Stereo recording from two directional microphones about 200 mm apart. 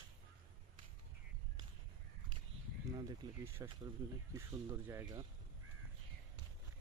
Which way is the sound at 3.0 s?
15° right (ahead or behind).